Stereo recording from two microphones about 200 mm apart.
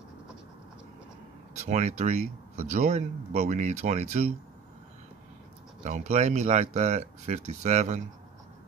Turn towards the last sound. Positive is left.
turn(degrees=-35)  # may be behind; listen again after turning